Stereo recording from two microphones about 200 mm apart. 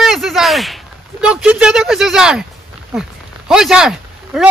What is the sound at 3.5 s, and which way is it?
Speech, 5° right (ahead or behind).